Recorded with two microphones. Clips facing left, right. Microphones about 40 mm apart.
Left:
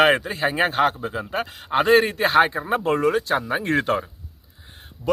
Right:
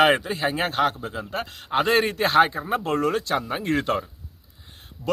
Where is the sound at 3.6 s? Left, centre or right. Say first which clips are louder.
Left 2 dB; centre.